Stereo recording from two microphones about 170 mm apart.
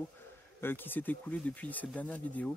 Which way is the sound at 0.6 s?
10° left (ahead or behind).